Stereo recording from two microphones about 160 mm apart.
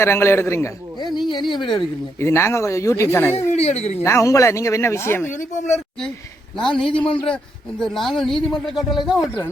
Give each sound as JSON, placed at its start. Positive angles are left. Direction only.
{"t": 0.0, "sound": "speech", "side_deg": 15}
{"t": 0.9, "sound": "speech", "side_deg": 25}
{"t": 2.1, "sound": "speech", "side_deg": 15}
{"t": 3.5, "sound": "speech", "side_deg": 40}
{"t": 4.0, "sound": "speech", "side_deg": 20}
{"t": 5.3, "sound": "speech", "side_deg": 50}
{"t": 6.6, "sound": "speech", "side_deg": 5}